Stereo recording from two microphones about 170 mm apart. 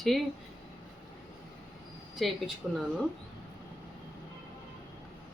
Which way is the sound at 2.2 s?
Centre (ahead or behind).